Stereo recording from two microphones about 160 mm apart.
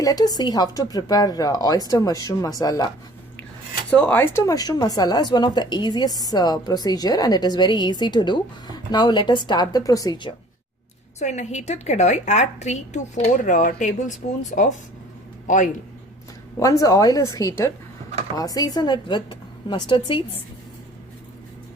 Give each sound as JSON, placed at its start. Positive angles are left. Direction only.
{"t": 0.0, "sound": "a woman's voice", "side_deg": 25}
{"t": 3.9, "sound": "a woman's voice", "side_deg": 10}
{"t": 11.2, "sound": "a woman's voice", "side_deg": 45}
{"t": 16.6, "sound": "a woman's voice", "side_deg": 20}